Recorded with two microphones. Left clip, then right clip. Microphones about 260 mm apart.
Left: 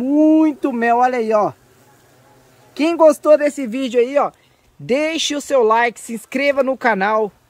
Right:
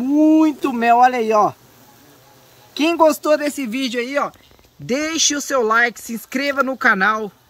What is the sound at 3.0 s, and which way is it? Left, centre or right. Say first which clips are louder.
Speech: left 4 dB; centre.